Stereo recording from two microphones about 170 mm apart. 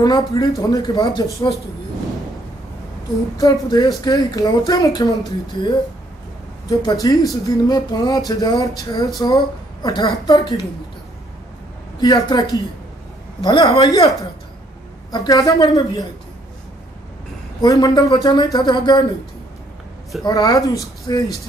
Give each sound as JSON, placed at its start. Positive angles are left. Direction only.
{"t": 0.0, "sound": "speech", "side_deg": 20}
{"t": 3.3, "sound": "speech", "side_deg": 20}
{"t": 12.0, "sound": "speech", "side_deg": 25}
{"t": 15.0, "sound": "speech", "side_deg": 25}
{"t": 17.6, "sound": "speech", "side_deg": 20}
{"t": 20.2, "sound": "speech", "side_deg": 25}